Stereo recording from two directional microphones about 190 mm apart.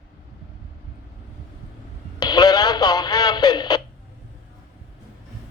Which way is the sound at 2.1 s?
20° left (ahead or behind).